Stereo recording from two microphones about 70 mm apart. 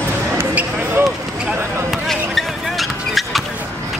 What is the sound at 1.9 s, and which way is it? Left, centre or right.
Basketball bounce, centre.